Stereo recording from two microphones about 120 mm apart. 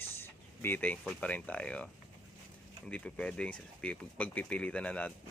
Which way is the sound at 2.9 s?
10° left (ahead or behind).